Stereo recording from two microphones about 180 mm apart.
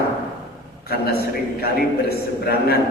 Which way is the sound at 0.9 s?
60° left (ahead or behind).